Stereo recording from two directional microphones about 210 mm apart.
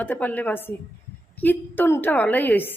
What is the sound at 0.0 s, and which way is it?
Speech, 10° left (ahead or behind).